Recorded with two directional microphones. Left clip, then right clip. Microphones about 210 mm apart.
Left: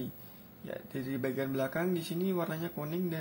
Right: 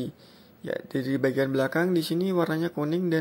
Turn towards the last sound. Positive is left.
turn(degrees=-35)  # may be behind; listen again after turning